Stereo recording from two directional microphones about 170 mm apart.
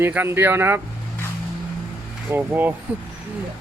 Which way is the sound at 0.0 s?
15° right (ahead or behind).